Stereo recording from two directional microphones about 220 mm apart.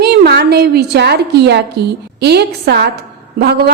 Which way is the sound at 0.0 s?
50° right (ahead or behind).